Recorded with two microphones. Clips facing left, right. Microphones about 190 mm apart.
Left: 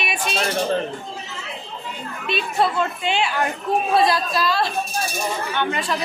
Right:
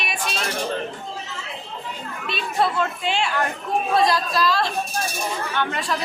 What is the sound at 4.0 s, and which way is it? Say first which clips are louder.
A woman's voice: left 1 dB; centre (ahead or behind).